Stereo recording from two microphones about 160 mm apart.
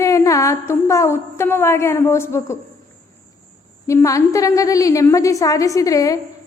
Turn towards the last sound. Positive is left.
turn(degrees=20)  # may be behind; listen again after turning